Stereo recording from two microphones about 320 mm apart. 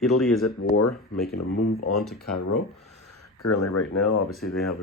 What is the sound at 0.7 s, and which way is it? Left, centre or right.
Speech, left.